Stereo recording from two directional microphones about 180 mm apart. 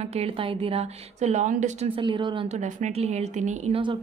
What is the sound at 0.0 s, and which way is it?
A woman's voice, 35° right (ahead or behind).